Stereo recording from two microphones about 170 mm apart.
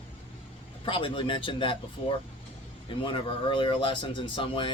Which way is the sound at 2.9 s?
30° left (ahead or behind).